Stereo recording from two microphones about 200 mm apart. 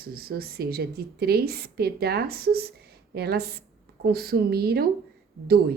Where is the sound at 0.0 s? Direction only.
50° right (ahead or behind).